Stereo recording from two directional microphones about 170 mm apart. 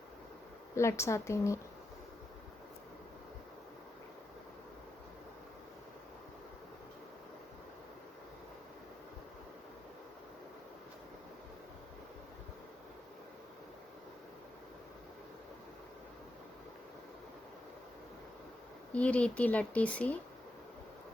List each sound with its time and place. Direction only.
0.8 s speech: 15° left (ahead or behind)
18.9 s speech: 5° left (ahead or behind)